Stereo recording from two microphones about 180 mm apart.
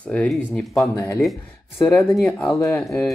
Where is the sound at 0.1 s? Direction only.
5° left (ahead or behind).